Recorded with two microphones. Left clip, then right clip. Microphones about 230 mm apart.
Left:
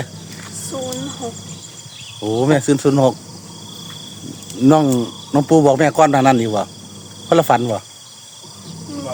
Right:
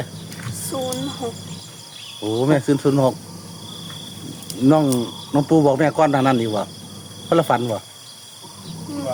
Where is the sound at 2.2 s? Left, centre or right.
Left.